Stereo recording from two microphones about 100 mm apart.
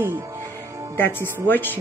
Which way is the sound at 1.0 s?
20° left (ahead or behind).